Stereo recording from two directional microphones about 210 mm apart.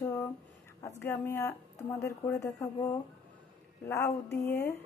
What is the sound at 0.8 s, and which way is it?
Speech, 10° left (ahead or behind).